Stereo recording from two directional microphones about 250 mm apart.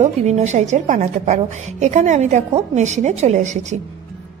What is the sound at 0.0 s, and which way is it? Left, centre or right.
A woman's voice, right.